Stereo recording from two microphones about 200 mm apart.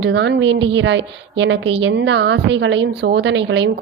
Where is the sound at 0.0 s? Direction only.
60° right (ahead or behind).